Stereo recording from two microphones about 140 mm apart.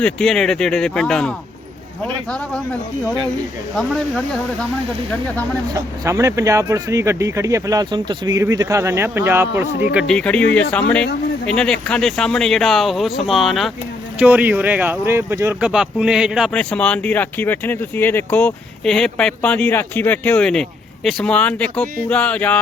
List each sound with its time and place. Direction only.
0.0 s speech: 5° left (ahead or behind)
3.8 s speech: centre (ahead or behind)
5.7 s speech: 20° right (ahead or behind)
10.1 s speech: 5° left (ahead or behind)
14.2 s speech: 10° right (ahead or behind)
15.6 s speech: 5° right (ahead or behind)
16.5 s speech: 10° left (ahead or behind)